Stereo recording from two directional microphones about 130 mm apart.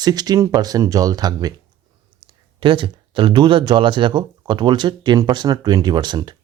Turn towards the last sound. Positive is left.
turn(degrees=-35)  # may be behind; listen again after turning